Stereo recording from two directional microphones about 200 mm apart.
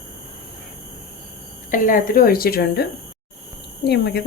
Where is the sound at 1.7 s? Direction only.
40° left (ahead or behind).